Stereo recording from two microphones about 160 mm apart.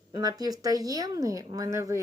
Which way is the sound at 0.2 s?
25° right (ahead or behind).